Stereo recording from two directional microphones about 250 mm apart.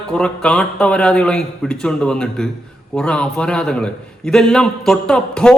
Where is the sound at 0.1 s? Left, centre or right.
Centre.